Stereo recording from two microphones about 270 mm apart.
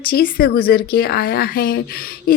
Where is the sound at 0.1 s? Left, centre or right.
Left.